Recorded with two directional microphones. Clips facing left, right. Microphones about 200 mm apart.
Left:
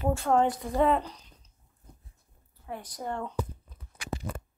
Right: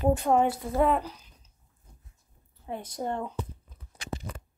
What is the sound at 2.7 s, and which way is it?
Speech, 25° right (ahead or behind).